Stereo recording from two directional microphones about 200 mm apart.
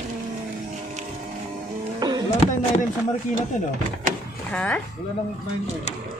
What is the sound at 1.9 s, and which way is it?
Music, 20° right (ahead or behind).